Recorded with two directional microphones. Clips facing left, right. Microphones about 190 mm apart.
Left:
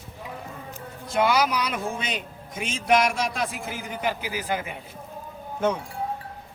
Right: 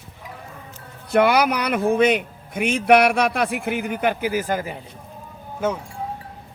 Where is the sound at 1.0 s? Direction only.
60° right (ahead or behind); by 4.8 s 40° right (ahead or behind).